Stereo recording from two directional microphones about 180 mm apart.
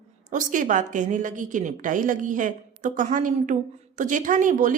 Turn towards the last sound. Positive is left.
turn(degrees=-45)  # may be behind; listen again after turning